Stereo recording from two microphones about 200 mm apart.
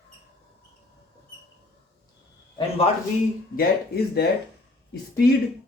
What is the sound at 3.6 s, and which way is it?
Speech, 55° left (ahead or behind).